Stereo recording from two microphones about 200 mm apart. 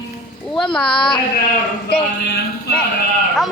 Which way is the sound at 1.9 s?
50° left (ahead or behind).